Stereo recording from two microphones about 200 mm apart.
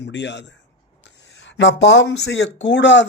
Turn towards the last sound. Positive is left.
turn(degrees=65)  # may be behind; listen again after turning